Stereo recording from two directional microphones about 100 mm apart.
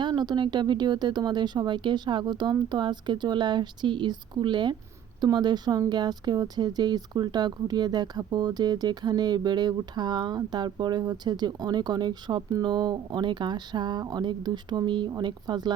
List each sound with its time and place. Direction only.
0.0 s speech: 45° right (ahead or behind)